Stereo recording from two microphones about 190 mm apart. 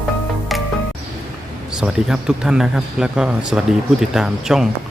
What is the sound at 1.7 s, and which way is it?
Speech, 5° right (ahead or behind).